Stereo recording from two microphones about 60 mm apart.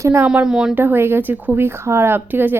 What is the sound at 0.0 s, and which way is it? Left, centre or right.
Speech, right.